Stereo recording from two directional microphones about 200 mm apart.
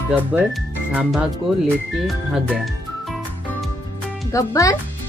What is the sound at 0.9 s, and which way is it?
Speech, 5° right (ahead or behind).